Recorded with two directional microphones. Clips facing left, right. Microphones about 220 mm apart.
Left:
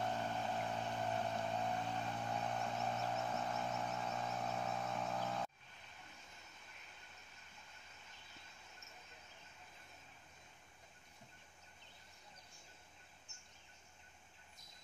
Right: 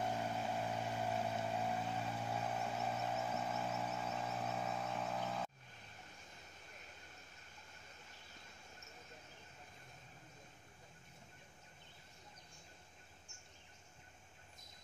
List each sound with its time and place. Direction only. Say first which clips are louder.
0.0 s vehicle: right 1 dB; 10° right (ahead or behind)